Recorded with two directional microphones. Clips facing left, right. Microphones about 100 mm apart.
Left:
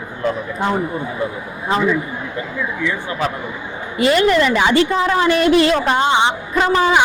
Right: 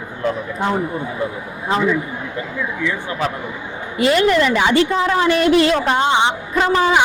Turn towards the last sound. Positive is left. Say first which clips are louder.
# left 1 dB
turn(degrees=25)  # may be behind; listen again after turning